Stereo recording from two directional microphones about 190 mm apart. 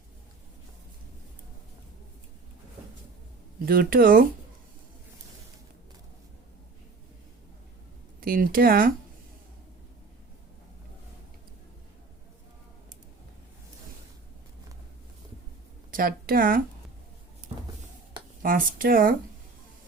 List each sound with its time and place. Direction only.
3.7 s speech: 50° right (ahead or behind)
8.2 s speech: 50° right (ahead or behind)
15.9 s a woman's voice: 50° right (ahead or behind)
18.4 s speech: 50° right (ahead or behind)